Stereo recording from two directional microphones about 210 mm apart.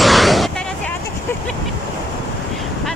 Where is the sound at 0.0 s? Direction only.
Centre (ahead or behind).